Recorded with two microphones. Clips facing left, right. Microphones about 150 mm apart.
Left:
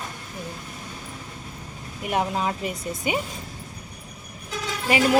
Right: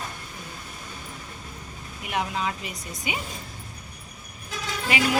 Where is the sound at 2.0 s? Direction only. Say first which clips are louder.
Left 4 dB; 45° left (ahead or behind).